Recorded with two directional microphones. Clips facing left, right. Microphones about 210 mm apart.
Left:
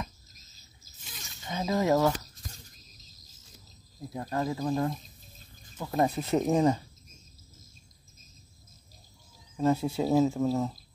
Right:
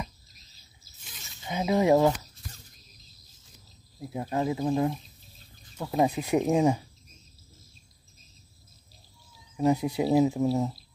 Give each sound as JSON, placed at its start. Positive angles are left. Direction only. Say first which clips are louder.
{"t": 0.3, "sound": "a sound", "louder": "left 1 dB", "side_deg": 45}
{"t": 1.4, "sound": "speech", "louder": "right 4 dB", "side_deg": -15}
{"t": 4.0, "sound": "speech", "louder": "right 3 dB", "side_deg": -15}
{"t": 9.6, "sound": "speech", "louder": "right 2 dB", "side_deg": -15}